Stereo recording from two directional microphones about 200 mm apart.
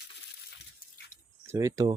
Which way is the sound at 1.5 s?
15° right (ahead or behind).